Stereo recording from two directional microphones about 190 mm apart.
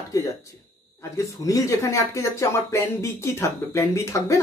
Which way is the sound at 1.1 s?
15° left (ahead or behind).